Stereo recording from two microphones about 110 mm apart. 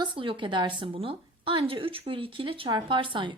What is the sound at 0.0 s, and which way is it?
A woman's voice, 50° right (ahead or behind).